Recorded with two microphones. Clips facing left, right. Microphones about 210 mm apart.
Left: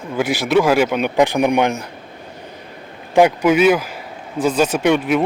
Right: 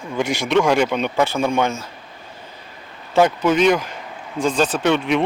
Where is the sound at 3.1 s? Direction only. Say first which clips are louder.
Left 3 dB; 15° left (ahead or behind).